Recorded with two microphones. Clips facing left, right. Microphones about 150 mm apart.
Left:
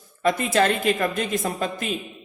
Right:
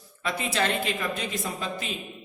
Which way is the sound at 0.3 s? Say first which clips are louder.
Left 7 dB; 50° left (ahead or behind).